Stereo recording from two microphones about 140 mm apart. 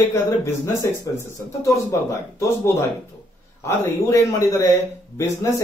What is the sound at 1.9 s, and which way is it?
Speech, 20° left (ahead or behind).